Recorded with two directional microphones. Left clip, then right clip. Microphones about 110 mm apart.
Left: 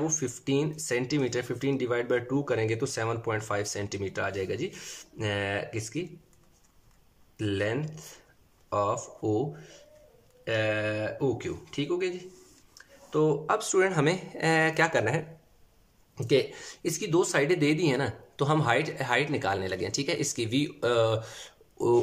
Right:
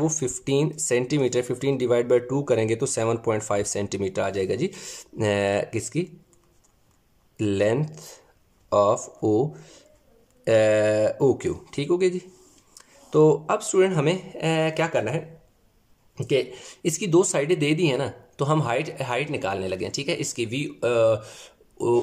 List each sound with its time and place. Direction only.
0.0 s speech: 40° right (ahead or behind)
7.3 s speech: 35° right (ahead or behind)
12.7 s a sound: 40° right (ahead or behind)
13.5 s speech: 20° right (ahead or behind)